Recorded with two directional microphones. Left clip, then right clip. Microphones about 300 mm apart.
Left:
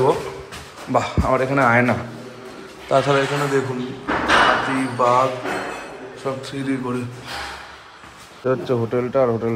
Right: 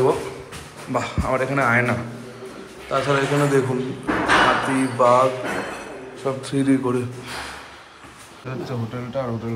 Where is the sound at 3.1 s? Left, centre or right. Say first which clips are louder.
Left 1 dB; centre.